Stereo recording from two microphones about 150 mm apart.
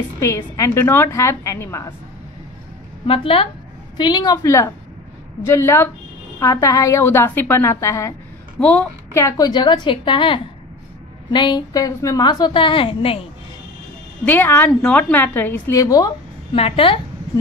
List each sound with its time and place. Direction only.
0.2 s a woman's voice: 20° left (ahead or behind)
3.1 s a woman's voice: 40° left (ahead or behind); by 8.1 s 20° left (ahead or behind)
8.5 s a woman's voice: 5° left (ahead or behind)
9.1 s a woman's voice: 25° left (ahead or behind)
14.2 s a woman's voice: 15° left (ahead or behind)
16.5 s a woman's voice: 40° left (ahead or behind)